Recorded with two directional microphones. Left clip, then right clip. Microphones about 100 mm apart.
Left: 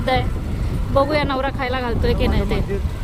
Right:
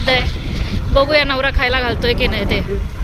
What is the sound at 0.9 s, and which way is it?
Speech, 20° left (ahead or behind).